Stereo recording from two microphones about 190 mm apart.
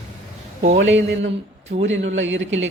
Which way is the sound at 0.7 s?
75° right (ahead or behind).